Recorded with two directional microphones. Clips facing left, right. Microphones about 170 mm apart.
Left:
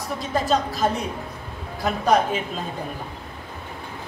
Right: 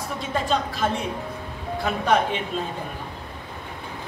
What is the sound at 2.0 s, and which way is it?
Speech, 40° left (ahead or behind).